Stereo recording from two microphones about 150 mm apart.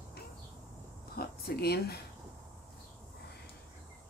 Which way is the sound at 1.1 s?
90° left.